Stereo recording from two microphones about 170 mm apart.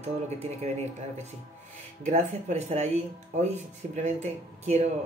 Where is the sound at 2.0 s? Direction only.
40° right (ahead or behind).